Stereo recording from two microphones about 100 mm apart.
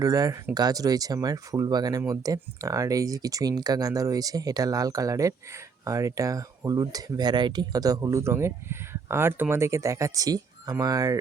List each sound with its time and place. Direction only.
0.0 s speech: 35° right (ahead or behind)